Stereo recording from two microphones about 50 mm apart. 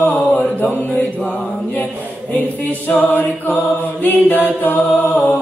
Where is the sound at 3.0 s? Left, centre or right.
Left.